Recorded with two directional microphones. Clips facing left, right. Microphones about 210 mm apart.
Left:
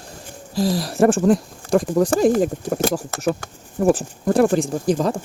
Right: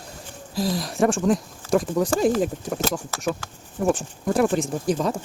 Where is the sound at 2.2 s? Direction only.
45° left (ahead or behind).